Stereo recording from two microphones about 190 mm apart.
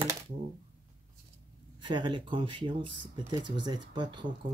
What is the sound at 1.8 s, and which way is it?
Speech, 25° right (ahead or behind).